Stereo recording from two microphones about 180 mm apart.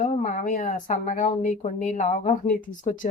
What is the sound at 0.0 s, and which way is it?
Speech, 45° left (ahead or behind).